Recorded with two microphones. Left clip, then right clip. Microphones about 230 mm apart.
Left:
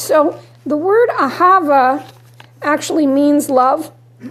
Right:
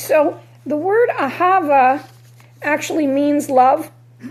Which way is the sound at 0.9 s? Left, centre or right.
Left.